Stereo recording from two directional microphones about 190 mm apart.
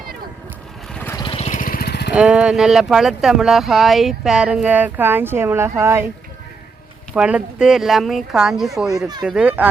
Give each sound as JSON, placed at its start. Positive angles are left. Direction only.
{"t": 1.1, "sound": "vehicle", "side_deg": 25}
{"t": 2.1, "sound": "speech", "side_deg": -5}
{"t": 7.1, "sound": "speech", "side_deg": -5}